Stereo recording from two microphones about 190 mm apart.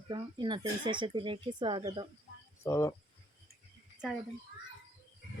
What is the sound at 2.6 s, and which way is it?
Speech, 15° left (ahead or behind).